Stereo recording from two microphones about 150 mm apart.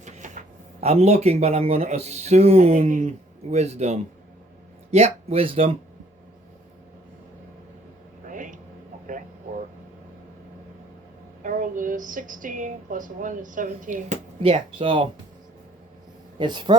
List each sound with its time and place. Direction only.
0.0 s speech: 55° right (ahead or behind); by 5.7 s 40° right (ahead or behind)
8.3 s a sound: 60° right (ahead or behind)
11.4 s a woman's voice: 60° right (ahead or behind)
14.4 s speech: 40° right (ahead or behind)
16.4 s speech: 30° right (ahead or behind)